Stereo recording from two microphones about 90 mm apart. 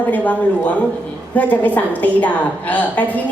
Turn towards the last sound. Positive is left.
turn(degrees=15)  # may be behind; listen again after turning